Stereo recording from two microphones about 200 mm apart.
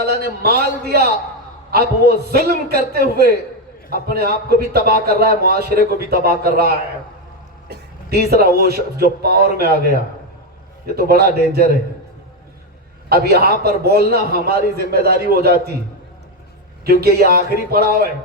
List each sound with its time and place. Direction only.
0.0 s a man's voice: 50° right (ahead or behind)
13.1 s a man's voice: 50° right (ahead or behind)
16.8 s a man's voice: 50° right (ahead or behind)